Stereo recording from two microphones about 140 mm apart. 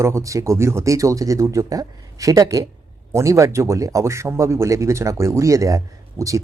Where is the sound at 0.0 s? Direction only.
20° right (ahead or behind).